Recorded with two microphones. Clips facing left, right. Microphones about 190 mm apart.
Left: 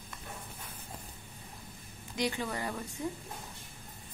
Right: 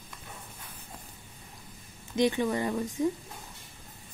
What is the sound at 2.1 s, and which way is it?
Speech, 20° right (ahead or behind).